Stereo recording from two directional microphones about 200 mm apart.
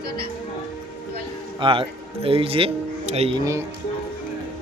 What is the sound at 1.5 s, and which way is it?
Speech, 25° right (ahead or behind).